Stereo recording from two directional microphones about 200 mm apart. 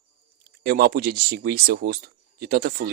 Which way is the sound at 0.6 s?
50° right (ahead or behind).